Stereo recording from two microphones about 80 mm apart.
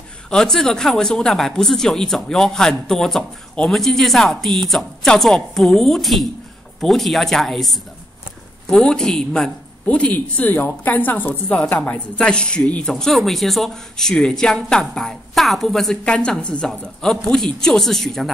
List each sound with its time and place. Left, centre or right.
0.3 s a woman's voice: centre
9.8 s a woman's voice: centre
12.9 s a woman's voice: centre